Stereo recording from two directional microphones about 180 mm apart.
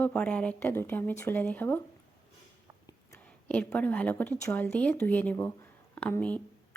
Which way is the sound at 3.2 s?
5° left (ahead or behind).